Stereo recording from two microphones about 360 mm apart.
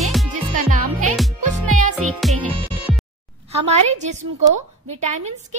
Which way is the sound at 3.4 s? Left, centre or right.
Centre.